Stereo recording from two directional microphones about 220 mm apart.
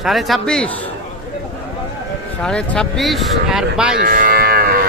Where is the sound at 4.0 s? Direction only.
40° right (ahead or behind).